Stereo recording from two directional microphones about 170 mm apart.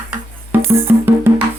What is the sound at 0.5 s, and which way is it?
Music, 10° right (ahead or behind).